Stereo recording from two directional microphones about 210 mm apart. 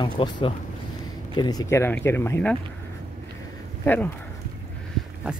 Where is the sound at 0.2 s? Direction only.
20° left (ahead or behind).